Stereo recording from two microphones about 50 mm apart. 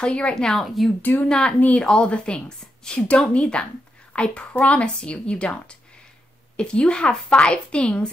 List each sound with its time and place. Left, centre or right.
0.0 s a woman's voice: left
0.6 s speech: centre
1.0 s a woman's voice: left
1.9 s a woman's voice: left